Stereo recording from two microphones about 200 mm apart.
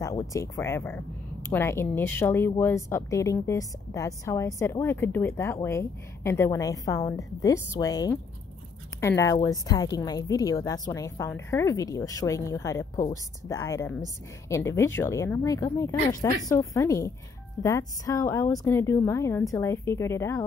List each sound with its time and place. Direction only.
0.0 s speech: 15° left (ahead or behind)